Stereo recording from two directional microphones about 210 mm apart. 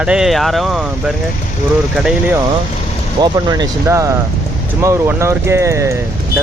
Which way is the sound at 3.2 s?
20° right (ahead or behind).